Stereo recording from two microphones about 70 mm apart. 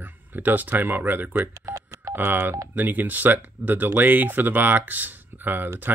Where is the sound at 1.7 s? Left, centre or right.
Right.